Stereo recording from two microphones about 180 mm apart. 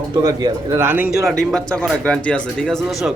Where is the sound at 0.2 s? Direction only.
20° right (ahead or behind).